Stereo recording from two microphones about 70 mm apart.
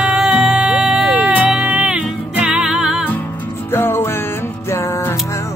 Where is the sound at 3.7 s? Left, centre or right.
Left.